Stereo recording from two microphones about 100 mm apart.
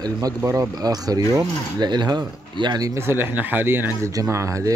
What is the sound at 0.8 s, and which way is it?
Speech, 40° right (ahead or behind).